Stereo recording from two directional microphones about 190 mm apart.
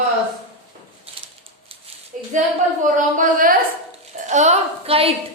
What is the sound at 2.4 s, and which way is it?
A woman's voice, 45° right (ahead or behind).